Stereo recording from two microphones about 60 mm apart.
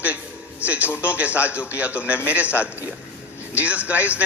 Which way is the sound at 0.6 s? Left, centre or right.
Right.